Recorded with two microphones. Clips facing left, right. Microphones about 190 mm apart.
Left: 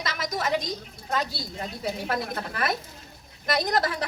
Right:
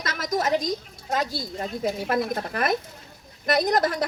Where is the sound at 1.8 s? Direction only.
45° right (ahead or behind).